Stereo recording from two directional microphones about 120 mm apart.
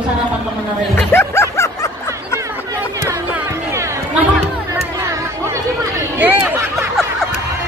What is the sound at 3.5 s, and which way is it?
Run, 25° right (ahead or behind).